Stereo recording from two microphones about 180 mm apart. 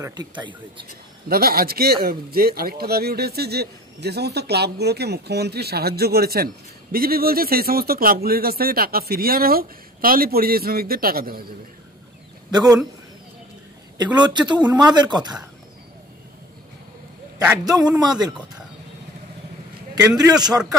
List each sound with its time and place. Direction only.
0.1 s speech: 25° right (ahead or behind)
1.3 s speech: 55° right (ahead or behind)
12.4 s speech: 20° right (ahead or behind)
13.9 s speech: 25° right (ahead or behind)
17.4 s a man's voice: 10° right (ahead or behind)
17.7 s speech: 20° right (ahead or behind)
20.0 s speech: 20° right (ahead or behind)